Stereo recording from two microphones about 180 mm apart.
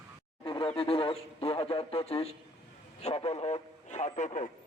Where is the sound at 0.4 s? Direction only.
30° left (ahead or behind).